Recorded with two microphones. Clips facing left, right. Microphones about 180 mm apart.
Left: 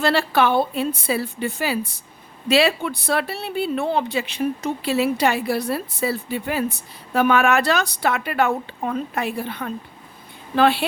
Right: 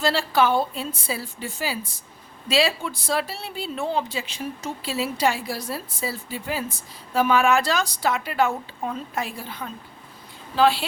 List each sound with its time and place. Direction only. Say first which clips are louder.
0.0 s speech: left 2 dB; 60° left (ahead or behind)